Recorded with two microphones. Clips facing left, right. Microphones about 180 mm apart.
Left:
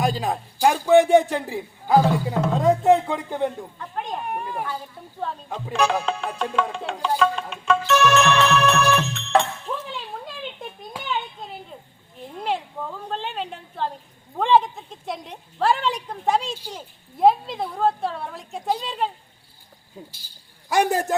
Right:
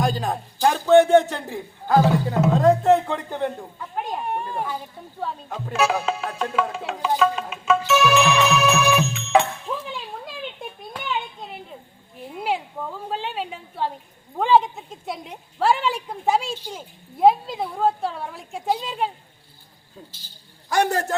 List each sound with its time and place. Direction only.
0.0 s speech: 5° left (ahead or behind)
3.8 s speech: 5° right (ahead or behind)
4.3 s a sound: 30° right (ahead or behind)
5.2 s a woman's voice: centre (ahead or behind)
7.9 s music: 5° right (ahead or behind)
9.7 s a sound: 5° right (ahead or behind)
12.3 s a sound: 5° right (ahead or behind)
13.1 s a woman's voice: 5° right (ahead or behind)
20.1 s speech: 10° left (ahead or behind)